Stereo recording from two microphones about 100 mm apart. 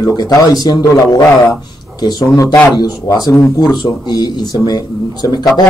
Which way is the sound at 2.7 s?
40° left (ahead or behind).